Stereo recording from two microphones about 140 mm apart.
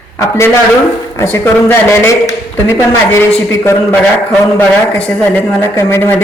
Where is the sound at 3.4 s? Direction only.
15° left (ahead or behind).